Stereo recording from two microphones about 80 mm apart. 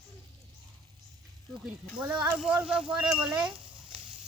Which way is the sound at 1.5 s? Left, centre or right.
Right.